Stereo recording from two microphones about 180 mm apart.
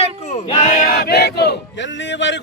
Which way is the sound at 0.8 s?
60° left (ahead or behind).